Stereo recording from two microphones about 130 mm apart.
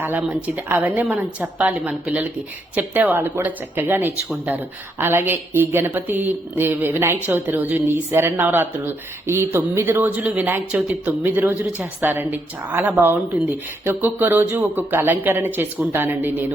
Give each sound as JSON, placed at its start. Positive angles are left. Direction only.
{"t": 0.0, "sound": "speech", "side_deg": -15}